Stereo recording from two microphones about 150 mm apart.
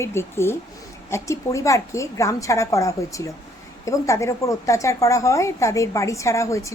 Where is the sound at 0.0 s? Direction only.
15° left (ahead or behind).